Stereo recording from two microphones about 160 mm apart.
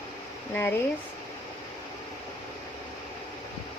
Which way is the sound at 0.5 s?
10° left (ahead or behind).